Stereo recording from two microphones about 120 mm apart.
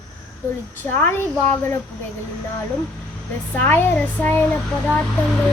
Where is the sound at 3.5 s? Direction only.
15° left (ahead or behind).